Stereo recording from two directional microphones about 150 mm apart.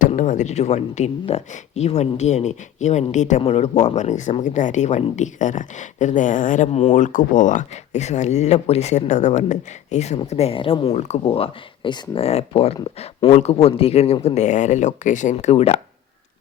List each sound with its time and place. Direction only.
0.2 s speech: 55° left (ahead or behind)